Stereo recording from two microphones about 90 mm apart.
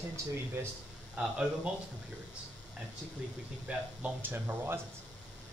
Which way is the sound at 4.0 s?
20° right (ahead or behind).